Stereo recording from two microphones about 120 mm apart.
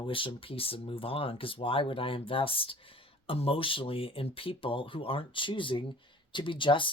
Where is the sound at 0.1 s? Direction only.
45° left (ahead or behind).